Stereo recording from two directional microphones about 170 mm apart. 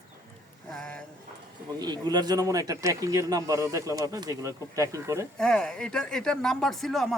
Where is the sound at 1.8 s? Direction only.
25° right (ahead or behind).